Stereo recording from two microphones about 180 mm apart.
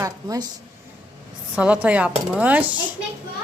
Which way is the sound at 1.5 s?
5° right (ahead or behind).